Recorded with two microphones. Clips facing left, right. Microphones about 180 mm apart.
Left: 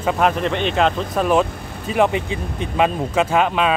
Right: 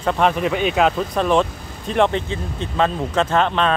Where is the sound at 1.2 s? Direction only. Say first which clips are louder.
Left 2 dB; 5° left (ahead or behind).